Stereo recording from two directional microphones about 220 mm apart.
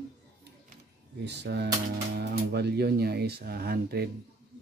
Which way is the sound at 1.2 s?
50° right (ahead or behind).